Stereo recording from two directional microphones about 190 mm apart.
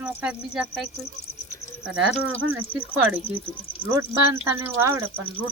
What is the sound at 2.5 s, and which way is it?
Speech, 10° right (ahead or behind).